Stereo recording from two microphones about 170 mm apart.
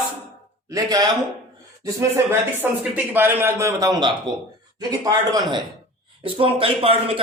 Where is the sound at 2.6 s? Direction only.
10° right (ahead or behind).